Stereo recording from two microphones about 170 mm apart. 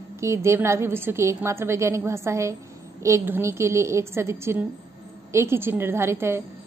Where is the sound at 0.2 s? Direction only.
15° right (ahead or behind).